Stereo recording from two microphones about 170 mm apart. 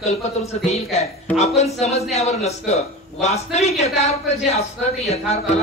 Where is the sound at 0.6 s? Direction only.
40° left (ahead or behind).